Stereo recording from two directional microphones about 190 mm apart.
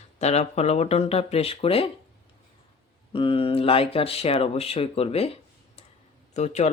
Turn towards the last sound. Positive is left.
turn(degrees=35)  # may be behind; listen again after turning